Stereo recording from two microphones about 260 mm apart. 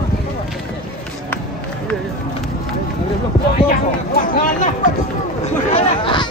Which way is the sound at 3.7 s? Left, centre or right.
Left.